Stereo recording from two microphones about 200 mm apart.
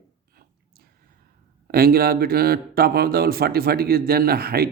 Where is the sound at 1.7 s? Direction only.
50° right (ahead or behind).